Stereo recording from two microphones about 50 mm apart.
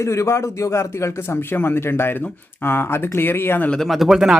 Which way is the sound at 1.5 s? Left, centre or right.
Left.